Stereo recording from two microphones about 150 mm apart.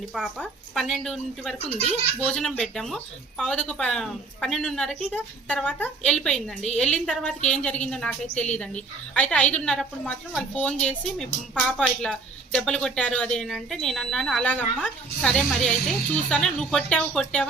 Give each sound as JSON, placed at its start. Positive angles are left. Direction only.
{"t": 0.1, "sound": "speech", "side_deg": 5}
{"t": 1.5, "sound": "speech", "side_deg": 45}
{"t": 2.1, "sound": "a woman's voice", "side_deg": 5}